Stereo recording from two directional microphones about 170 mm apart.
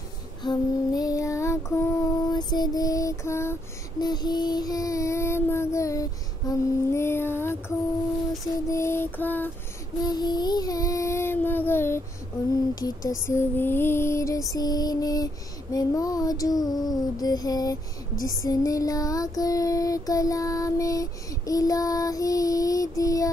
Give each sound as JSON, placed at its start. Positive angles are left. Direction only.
{"t": 0.4, "sound": "female singing", "side_deg": 25}
{"t": 4.0, "sound": "a sound", "side_deg": 25}
{"t": 8.6, "sound": "music", "side_deg": 15}
{"t": 10.0, "sound": "child singing", "side_deg": 25}
{"t": 12.7, "sound": "a sound", "side_deg": 20}
{"t": 13.3, "sound": "female singing", "side_deg": 15}